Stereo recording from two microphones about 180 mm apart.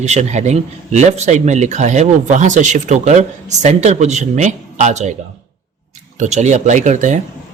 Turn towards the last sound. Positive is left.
turn(degrees=-45)  # may be behind; listen again after turning